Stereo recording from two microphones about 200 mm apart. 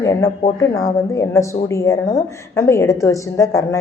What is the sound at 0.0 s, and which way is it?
A woman's voice, 15° left (ahead or behind).